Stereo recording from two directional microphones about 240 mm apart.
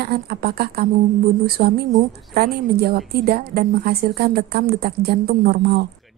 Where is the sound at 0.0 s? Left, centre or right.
Right.